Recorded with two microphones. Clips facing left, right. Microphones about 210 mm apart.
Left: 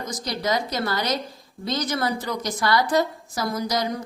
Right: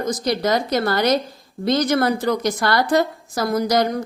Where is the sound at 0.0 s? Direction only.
55° right (ahead or behind).